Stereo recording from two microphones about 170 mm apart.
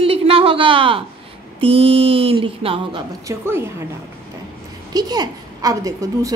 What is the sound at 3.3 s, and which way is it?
Speech, 15° right (ahead or behind).